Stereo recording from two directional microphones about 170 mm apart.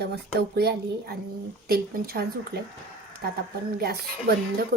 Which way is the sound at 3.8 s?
65° right (ahead or behind).